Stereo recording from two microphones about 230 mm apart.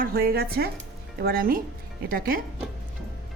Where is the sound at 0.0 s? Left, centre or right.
Right.